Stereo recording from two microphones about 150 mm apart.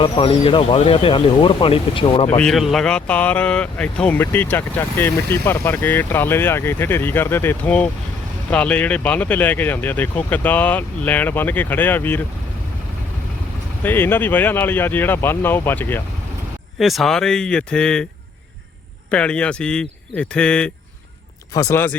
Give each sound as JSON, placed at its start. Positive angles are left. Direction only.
{"t": 0.0, "sound": "speech", "side_deg": 40}
{"t": 2.4, "sound": "speech", "side_deg": 0}
{"t": 13.8, "sound": "speech", "side_deg": 15}
{"t": 16.7, "sound": "speech", "side_deg": 0}
{"t": 19.1, "sound": "speech", "side_deg": 5}
{"t": 21.5, "sound": "speech", "side_deg": 20}